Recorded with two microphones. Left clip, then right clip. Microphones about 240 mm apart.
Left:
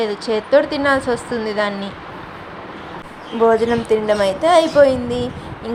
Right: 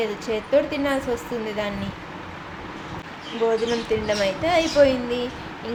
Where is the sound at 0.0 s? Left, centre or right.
Centre.